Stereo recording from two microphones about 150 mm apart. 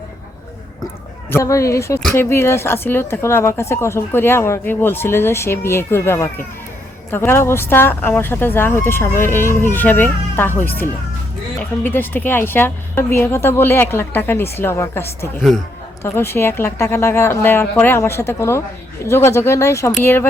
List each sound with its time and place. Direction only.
1.3 s a woman's voice: 20° left (ahead or behind)